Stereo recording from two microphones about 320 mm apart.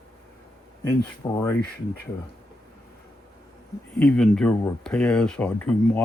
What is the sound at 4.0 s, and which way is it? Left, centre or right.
Speech, centre.